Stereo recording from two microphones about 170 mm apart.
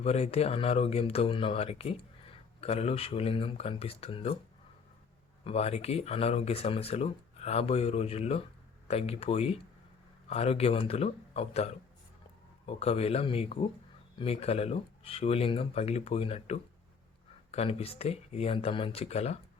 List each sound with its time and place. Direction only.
0.0 s speech: 35° left (ahead or behind)
5.5 s speech: 35° left (ahead or behind)